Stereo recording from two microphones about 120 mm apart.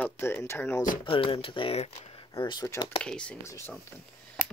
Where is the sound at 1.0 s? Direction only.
45° left (ahead or behind).